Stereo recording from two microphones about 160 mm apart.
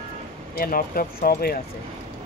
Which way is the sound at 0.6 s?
65° left (ahead or behind).